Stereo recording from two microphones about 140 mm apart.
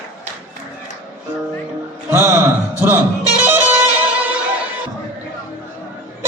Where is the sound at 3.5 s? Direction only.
15° right (ahead or behind).